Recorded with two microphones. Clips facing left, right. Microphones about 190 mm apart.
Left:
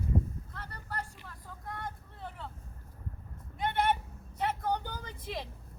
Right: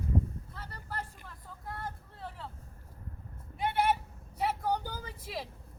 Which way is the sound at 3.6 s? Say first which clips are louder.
Right 1 dB; 10° right (ahead or behind).